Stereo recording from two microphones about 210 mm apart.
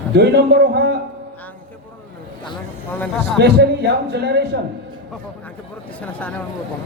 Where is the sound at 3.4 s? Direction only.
50° right (ahead or behind).